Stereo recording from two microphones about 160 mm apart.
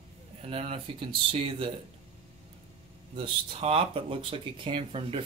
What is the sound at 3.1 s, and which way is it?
Speech, 30° right (ahead or behind).